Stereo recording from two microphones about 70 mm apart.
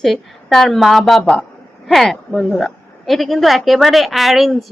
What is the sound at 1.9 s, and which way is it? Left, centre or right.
A woman's voice, centre.